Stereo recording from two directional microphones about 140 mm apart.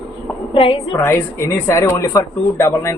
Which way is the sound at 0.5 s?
40° left (ahead or behind).